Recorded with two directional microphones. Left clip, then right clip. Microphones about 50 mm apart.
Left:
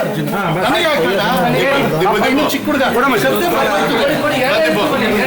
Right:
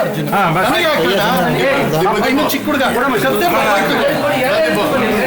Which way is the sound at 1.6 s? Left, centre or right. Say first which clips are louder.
Even; centre.